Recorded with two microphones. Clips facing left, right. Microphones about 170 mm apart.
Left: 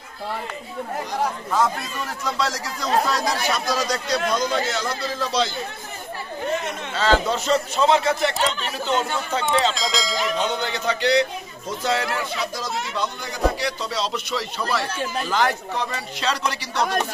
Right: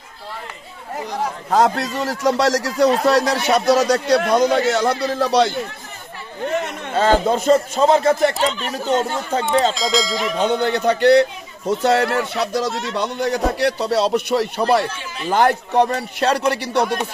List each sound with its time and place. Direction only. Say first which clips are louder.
1.5 s speech: right 10 dB; 75° right (ahead or behind)
6.9 s a man's voice: right 5 dB; 50° right (ahead or behind)
9.8 s speech: right 5 dB; centre (ahead or behind)
10.4 s speech: right 7 dB; 55° right (ahead or behind)